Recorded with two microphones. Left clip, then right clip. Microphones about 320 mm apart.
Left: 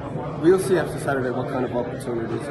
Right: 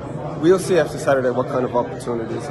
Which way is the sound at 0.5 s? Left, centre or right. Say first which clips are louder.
Right 3 dB; right.